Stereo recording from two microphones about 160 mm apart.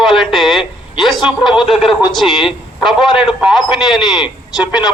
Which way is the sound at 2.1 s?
Centre (ahead or behind).